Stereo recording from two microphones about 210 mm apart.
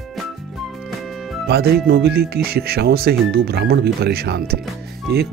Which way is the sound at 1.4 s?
50° right (ahead or behind).